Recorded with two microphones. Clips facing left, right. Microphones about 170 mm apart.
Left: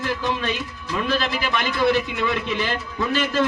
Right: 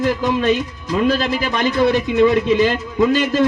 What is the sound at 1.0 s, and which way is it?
Speech, 45° right (ahead or behind).